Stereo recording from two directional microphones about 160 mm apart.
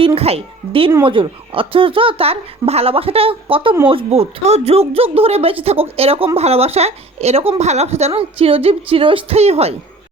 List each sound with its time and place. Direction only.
0.0 s speech: 35° right (ahead or behind)